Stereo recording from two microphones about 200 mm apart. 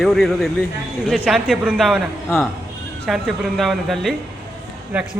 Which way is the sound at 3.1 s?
Centre (ahead or behind).